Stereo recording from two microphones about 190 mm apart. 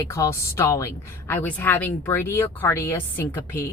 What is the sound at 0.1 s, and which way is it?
Speech, 15° left (ahead or behind).